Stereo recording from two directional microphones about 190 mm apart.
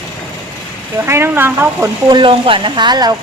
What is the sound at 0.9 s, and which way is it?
Speech, 15° right (ahead or behind).